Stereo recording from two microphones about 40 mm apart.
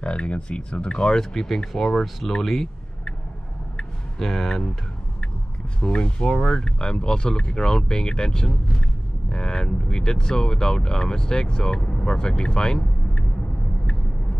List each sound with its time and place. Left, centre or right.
0.0 s speech: left
1.1 s speech: centre
2.2 s speech: centre
4.2 s speech: centre
5.8 s speech: left